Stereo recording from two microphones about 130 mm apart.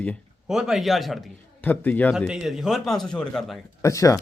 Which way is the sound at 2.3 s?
5° right (ahead or behind).